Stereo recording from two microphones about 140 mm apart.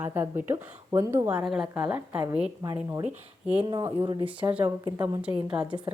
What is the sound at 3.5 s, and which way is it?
Speech, 35° right (ahead or behind).